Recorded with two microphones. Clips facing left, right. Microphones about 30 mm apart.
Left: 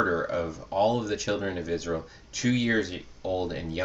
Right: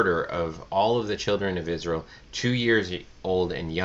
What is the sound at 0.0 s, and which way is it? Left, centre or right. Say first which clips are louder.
Speech: right 2 dB; right.